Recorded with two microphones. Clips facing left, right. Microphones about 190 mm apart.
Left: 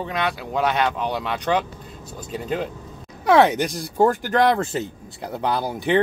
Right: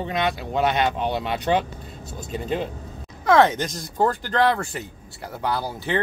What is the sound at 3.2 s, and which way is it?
Speech, 15° left (ahead or behind).